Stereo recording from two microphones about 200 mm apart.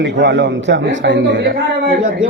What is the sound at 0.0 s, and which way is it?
A man's voice, 60° right (ahead or behind).